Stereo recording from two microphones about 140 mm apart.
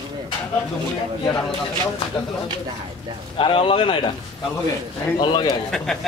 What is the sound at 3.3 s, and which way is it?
Speech, 40° left (ahead or behind).